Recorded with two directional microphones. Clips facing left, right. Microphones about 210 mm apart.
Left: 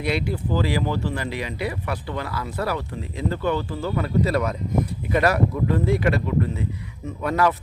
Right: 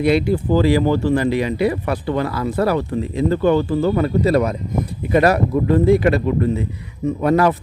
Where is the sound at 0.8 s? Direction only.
45° right (ahead or behind).